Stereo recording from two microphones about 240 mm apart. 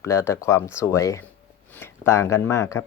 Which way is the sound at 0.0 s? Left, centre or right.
Centre.